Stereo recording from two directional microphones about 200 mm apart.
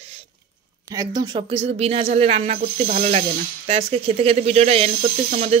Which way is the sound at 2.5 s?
40° right (ahead or behind).